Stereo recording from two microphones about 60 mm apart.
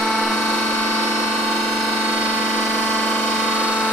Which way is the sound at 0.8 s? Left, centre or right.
Left.